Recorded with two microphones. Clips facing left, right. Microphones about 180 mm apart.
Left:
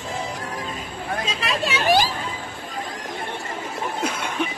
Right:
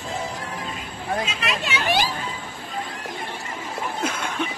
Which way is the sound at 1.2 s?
35° left (ahead or behind).